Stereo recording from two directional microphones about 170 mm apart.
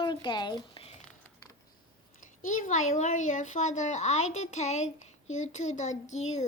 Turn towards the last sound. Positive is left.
turn(degrees=45)  # may be behind; listen again after turning